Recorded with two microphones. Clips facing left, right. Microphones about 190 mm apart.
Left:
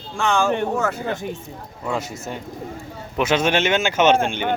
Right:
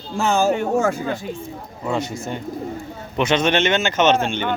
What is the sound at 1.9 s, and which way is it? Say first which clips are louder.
Speech: right 3 dB; 5° left (ahead or behind).